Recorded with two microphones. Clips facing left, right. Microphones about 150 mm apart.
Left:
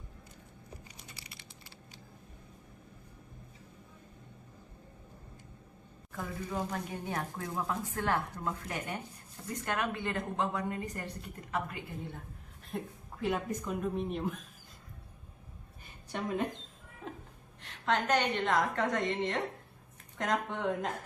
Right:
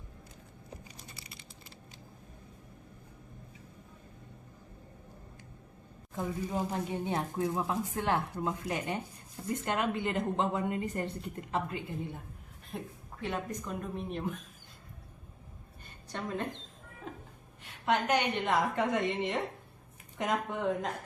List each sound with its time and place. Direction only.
6.1 s speech: 25° right (ahead or behind)
12.7 s a woman's voice: centre (ahead or behind)
16.1 s a woman's voice: 5° left (ahead or behind)
17.6 s a woman's voice: 10° right (ahead or behind)